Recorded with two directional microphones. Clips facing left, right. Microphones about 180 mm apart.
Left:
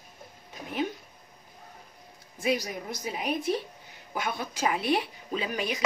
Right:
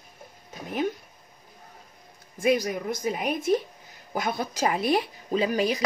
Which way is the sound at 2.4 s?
50° right (ahead or behind).